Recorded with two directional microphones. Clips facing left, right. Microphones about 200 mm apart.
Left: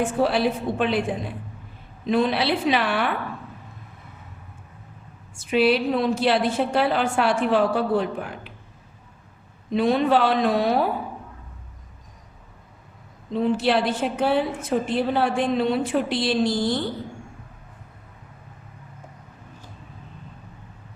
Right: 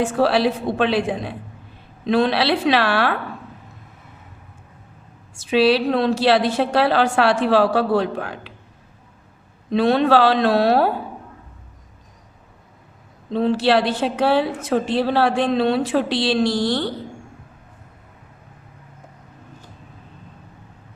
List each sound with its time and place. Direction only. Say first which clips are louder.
0.0 s a woman's voice: right 3 dB; 85° right
5.4 s a woman's voice: right 3 dB; 90° right
9.7 s a woman's voice: right 4 dB; 75° right (ahead or behind)
13.3 s a woman's voice: right 4 dB; 75° right (ahead or behind)